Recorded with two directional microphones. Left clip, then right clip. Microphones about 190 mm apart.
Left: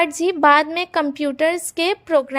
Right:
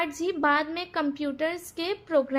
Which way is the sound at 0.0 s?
40° left (ahead or behind).